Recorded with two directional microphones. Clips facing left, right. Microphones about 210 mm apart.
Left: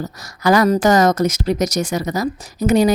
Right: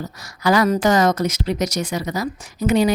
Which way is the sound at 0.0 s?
45° left (ahead or behind).